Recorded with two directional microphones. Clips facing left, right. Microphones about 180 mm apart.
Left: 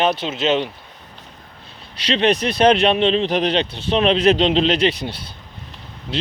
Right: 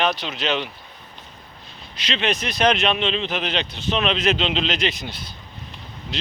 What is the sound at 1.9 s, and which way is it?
Speech, 35° left (ahead or behind).